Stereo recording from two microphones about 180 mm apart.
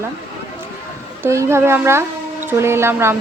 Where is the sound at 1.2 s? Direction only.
15° right (ahead or behind).